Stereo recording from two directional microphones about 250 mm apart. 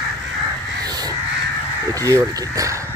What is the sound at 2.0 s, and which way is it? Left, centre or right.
Speech, centre.